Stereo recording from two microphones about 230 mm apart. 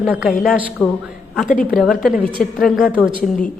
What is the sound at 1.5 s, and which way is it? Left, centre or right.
Speech, left.